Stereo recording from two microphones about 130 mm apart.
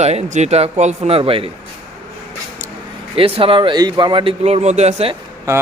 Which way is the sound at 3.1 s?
45° right (ahead or behind).